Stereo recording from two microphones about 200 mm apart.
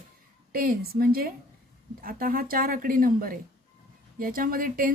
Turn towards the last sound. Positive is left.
turn(degrees=-45)  # may be behind; listen again after turning